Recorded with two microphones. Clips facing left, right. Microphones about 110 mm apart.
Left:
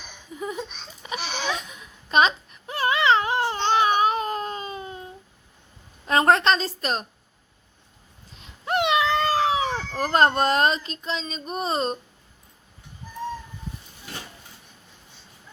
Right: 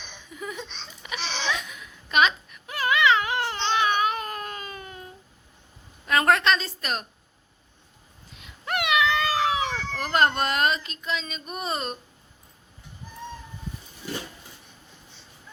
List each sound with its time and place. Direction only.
0.3 s baby laughter: 35° left (ahead or behind)
1.2 s a sound: 10° left (ahead or behind)
1.5 s baby cry: 35° left (ahead or behind)
3.6 s baby cry: 35° left (ahead or behind)
6.1 s a woman's voice: 30° left (ahead or behind)
8.4 s cat: 30° left (ahead or behind)